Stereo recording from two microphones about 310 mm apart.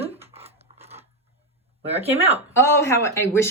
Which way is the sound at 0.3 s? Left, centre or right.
Centre.